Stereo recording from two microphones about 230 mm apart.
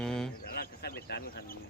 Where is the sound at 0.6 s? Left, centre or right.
Left.